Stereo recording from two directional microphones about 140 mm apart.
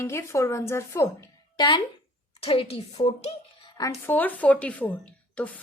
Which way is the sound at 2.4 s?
45° left (ahead or behind).